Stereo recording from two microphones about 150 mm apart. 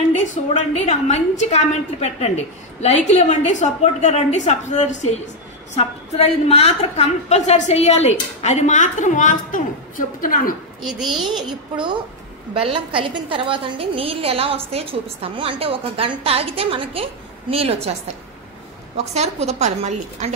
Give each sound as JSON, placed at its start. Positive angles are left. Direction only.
{"t": 0.3, "sound": "a woman's voice", "side_deg": 50}
{"t": 10.8, "sound": "a child's voice", "side_deg": 0}
{"t": 12.5, "sound": "a woman's voice", "side_deg": -35}
{"t": 19.1, "sound": "a woman's voice", "side_deg": -45}